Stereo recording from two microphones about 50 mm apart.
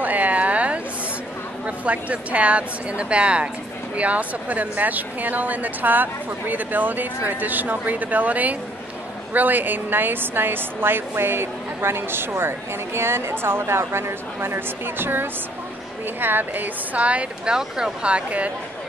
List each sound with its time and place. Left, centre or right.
0.0 s a sound: right
1.9 s a woman's voice: right
17.5 s speech: centre
18.1 s speech: right